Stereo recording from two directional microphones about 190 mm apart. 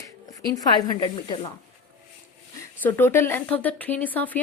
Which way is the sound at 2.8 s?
10° left (ahead or behind).